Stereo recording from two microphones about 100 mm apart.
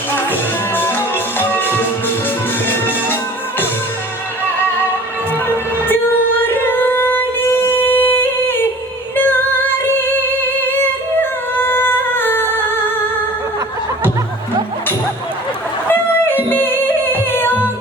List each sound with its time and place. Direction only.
0.3 s music: 20° left (ahead or behind)
5.9 s singing: 20° left (ahead or behind)
15.9 s music: 20° left (ahead or behind)